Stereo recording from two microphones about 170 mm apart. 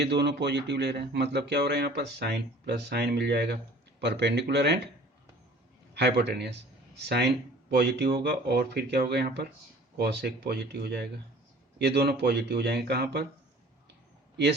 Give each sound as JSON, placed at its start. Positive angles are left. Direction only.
{"t": 0.0, "sound": "speech", "side_deg": -80}
{"t": 4.0, "sound": "speech", "side_deg": -85}
{"t": 5.9, "sound": "speech", "side_deg": -75}